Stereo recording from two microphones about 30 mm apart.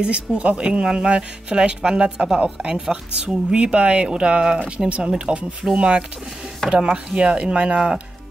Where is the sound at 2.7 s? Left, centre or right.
Right.